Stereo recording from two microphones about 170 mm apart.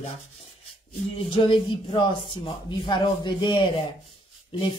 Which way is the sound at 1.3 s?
30° left (ahead or behind).